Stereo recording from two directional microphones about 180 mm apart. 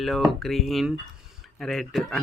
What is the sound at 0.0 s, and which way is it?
Speech, centre (ahead or behind).